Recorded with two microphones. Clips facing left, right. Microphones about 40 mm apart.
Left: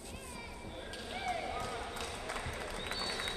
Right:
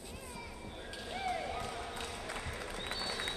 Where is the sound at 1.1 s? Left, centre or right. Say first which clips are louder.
Right 1 dB; centre.